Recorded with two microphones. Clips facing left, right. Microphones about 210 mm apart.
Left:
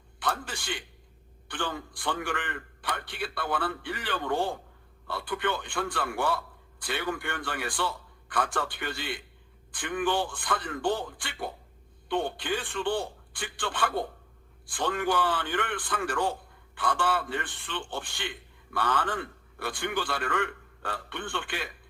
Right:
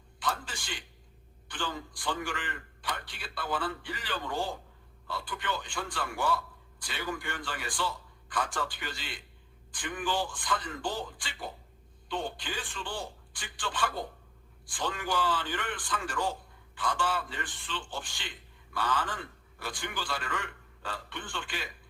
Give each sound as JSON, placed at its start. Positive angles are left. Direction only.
{"t": 0.2, "sound": "a man's voice", "side_deg": 60}